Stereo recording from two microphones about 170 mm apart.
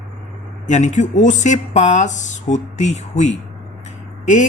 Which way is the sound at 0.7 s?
45° left (ahead or behind).